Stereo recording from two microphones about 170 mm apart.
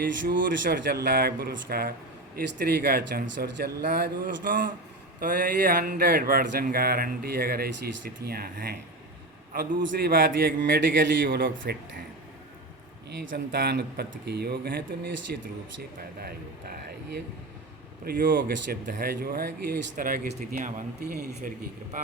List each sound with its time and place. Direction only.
0.6 s a man's voice: 65° right (ahead or behind)
9.8 s speech: 65° right (ahead or behind)
10.6 s speech: 90° right; by 11.8 s 55° right (ahead or behind)
13.1 s speech: 85° right
16.2 s speech: 65° right (ahead or behind)
18.0 s speech: 55° right (ahead or behind)
18.3 s a man's voice: 65° right (ahead or behind); by 20.8 s 50° right (ahead or behind)
21.0 s speech: 65° right (ahead or behind)